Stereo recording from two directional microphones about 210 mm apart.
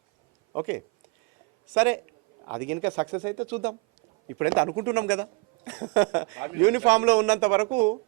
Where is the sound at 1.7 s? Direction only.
10° right (ahead or behind).